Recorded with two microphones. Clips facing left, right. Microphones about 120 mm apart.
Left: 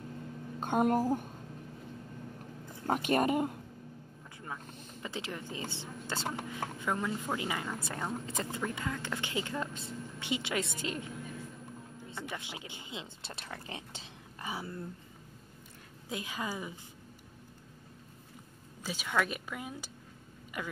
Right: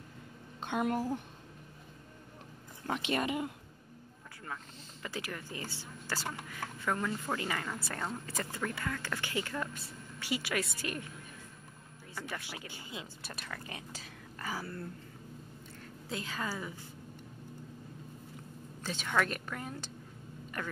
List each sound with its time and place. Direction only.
0.6 s a woman's voice: 45° left (ahead or behind)
2.9 s a woman's voice: 45° left (ahead or behind)
5.0 s a woman's voice: 20° left (ahead or behind)
12.2 s a woman's voice: 20° left (ahead or behind)
16.1 s speech: 15° left (ahead or behind)
18.9 s speech: 10° left (ahead or behind)